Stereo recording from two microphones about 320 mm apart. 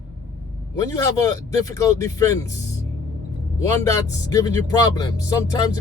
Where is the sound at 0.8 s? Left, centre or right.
Centre.